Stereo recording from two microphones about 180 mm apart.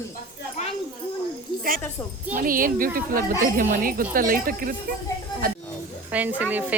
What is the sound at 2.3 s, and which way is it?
Speech, 50° right (ahead or behind).